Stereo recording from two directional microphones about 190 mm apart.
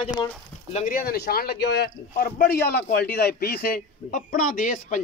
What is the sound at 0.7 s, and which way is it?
Speech, 45° left (ahead or behind).